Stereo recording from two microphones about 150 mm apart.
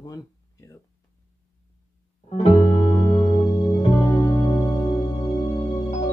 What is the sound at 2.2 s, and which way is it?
Music, 40° left (ahead or behind).